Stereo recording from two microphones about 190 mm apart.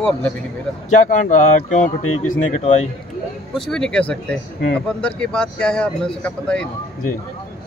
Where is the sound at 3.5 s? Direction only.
5° left (ahead or behind).